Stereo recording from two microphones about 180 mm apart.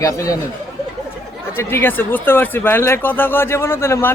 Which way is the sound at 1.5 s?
10° left (ahead or behind).